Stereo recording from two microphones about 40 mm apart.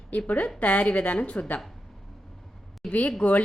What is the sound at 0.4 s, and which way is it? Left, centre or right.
A woman's voice, left.